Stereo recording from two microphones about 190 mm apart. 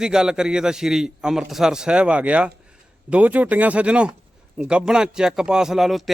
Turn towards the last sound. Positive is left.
turn(degrees=0)  # may be behind; listen again after turning